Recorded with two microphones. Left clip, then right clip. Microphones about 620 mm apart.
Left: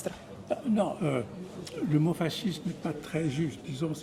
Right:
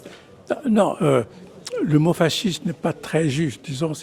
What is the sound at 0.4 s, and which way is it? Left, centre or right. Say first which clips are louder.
Speech: right 10 dB; right.